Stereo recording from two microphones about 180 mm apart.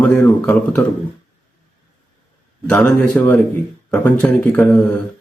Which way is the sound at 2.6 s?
5° left (ahead or behind).